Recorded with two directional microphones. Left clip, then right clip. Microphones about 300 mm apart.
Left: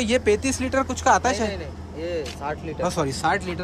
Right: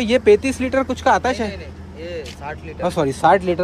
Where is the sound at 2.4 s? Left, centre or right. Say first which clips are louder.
Left 1 dB; left.